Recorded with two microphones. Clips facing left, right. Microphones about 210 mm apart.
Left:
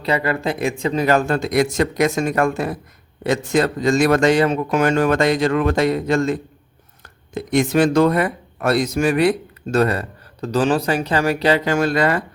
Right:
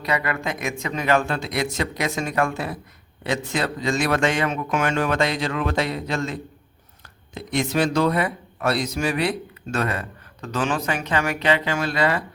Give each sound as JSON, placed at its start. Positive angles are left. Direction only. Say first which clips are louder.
{"t": 0.0, "sound": "speech", "louder": "left 5 dB", "side_deg": 30}
{"t": 9.7, "sound": "speech", "louder": "left 8 dB", "side_deg": 35}